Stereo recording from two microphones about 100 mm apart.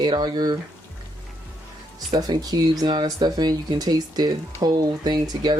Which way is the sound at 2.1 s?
40° right (ahead or behind).